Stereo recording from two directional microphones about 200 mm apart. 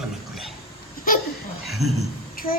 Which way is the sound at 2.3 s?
45° left (ahead or behind).